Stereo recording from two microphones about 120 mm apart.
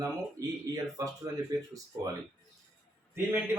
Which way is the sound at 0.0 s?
30° right (ahead or behind).